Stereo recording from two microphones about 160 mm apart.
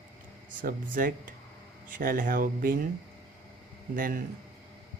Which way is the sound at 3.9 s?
60° right (ahead or behind).